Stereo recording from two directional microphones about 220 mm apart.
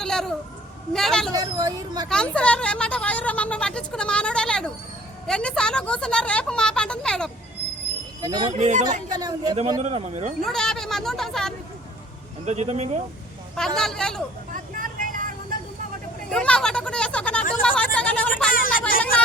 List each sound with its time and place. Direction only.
0.0 s a sound: centre (ahead or behind)
0.9 s speech: centre (ahead or behind)
1.3 s speech: 15° right (ahead or behind)
2.0 s speech: 5° left (ahead or behind)
8.2 s speech: 20° right (ahead or behind)
8.5 s speech: 30° right (ahead or behind)
9.1 s speech: 20° right (ahead or behind)
10.4 s speech: centre (ahead or behind)
12.5 s speech: 30° right (ahead or behind)
13.7 s speech: centre (ahead or behind)
14.5 s vehicle: 40° right (ahead or behind)
16.3 s speech: 5° left (ahead or behind)
17.6 s a sound: 5° left (ahead or behind)
18.5 s a sound: 40° left (ahead or behind)